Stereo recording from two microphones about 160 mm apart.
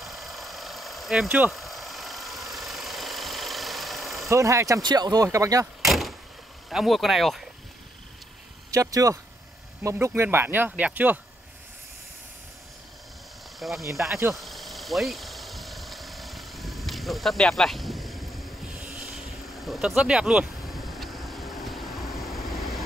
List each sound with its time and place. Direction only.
0.0 s a sound: centre (ahead or behind)
4.3 s speech: 20° right (ahead or behind)
5.9 s vehicle: centre (ahead or behind)
6.7 s speech: centre (ahead or behind)
8.7 s speech: 20° right (ahead or behind)
13.6 s speech: centre (ahead or behind)
14.1 s vehicle: centre (ahead or behind)